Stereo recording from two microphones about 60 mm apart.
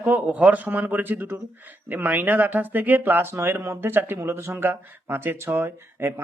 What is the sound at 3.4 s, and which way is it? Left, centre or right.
Speech, right.